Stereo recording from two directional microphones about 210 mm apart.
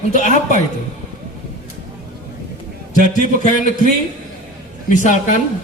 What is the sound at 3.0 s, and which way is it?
Speech, 35° left (ahead or behind).